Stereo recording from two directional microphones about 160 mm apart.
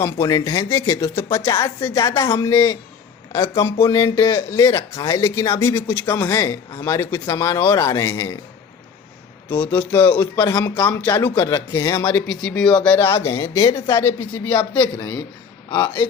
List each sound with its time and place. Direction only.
0.0 s speech: 20° left (ahead or behind)
9.5 s speech: 10° left (ahead or behind)